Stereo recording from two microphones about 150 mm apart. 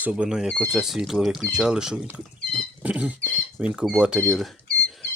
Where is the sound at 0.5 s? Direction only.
Centre (ahead or behind).